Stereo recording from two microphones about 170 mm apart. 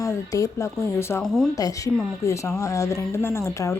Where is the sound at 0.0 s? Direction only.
20° left (ahead or behind).